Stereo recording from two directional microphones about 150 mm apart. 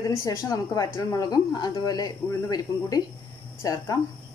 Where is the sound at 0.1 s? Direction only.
20° left (ahead or behind).